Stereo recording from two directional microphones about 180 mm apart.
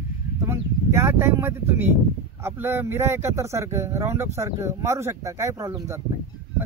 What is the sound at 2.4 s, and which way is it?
Speech, 15° right (ahead or behind).